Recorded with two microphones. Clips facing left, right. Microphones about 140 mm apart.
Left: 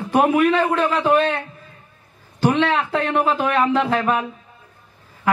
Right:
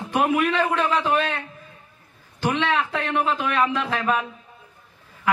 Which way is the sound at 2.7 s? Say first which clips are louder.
Left 4 dB; 35° left (ahead or behind).